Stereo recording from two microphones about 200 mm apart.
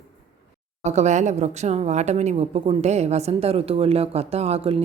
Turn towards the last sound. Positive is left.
turn(degrees=-30)  # may be behind; listen again after turning